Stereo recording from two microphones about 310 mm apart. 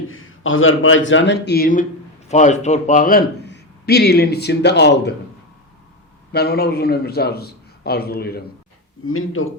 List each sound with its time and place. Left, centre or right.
0.1 s a man's voice: left
6.3 s a man's voice: left
9.0 s a man's voice: left